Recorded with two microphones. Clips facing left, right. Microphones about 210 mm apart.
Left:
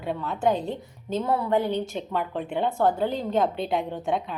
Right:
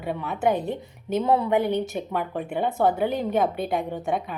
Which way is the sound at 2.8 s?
15° right (ahead or behind).